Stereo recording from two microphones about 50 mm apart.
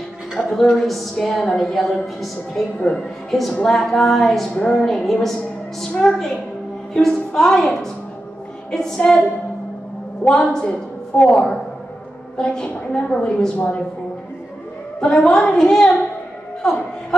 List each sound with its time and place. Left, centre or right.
0.4 s a woman's voice: centre
2.8 s a woman's voice: centre
3.3 s a woman's voice: centre
10.2 s a woman's voice: centre
15.0 s a woman's voice: centre